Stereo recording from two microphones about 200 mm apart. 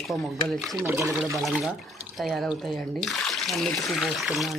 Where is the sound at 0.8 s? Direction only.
10° right (ahead or behind).